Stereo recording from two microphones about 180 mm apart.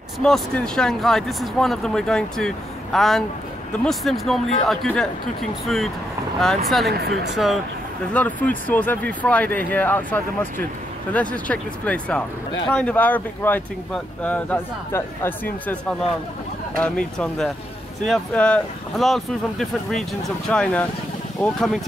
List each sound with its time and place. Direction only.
0.2 s speech: 5° left (ahead or behind)
6.4 s speech: centre (ahead or behind)
6.9 s speech: 60° right (ahead or behind)
7.2 s speech: centre (ahead or behind)